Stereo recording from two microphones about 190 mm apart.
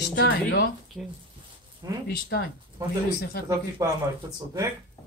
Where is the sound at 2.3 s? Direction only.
60° left (ahead or behind).